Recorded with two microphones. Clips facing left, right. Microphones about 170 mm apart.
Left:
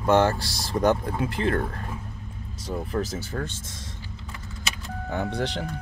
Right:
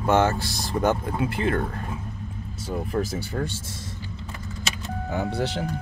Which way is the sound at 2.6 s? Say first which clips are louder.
Right 1 dB; 10° right (ahead or behind).